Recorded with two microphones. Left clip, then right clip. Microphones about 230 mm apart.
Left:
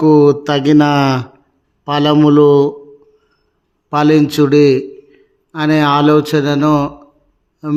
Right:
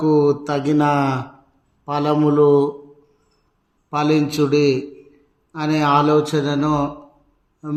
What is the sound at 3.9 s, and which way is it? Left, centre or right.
A man's voice, left.